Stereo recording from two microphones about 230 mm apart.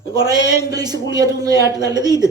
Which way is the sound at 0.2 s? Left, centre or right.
Centre.